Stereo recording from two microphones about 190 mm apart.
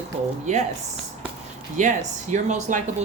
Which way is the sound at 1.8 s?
40° right (ahead or behind).